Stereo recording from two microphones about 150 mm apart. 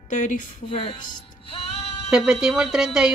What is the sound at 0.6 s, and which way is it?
Speech, 40° left (ahead or behind).